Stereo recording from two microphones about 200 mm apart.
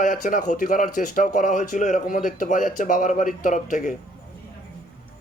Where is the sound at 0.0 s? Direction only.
40° left (ahead or behind).